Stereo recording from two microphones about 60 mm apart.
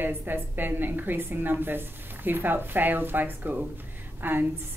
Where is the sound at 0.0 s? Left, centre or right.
Right.